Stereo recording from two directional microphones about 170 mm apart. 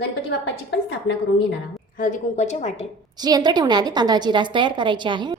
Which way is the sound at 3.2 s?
25° right (ahead or behind).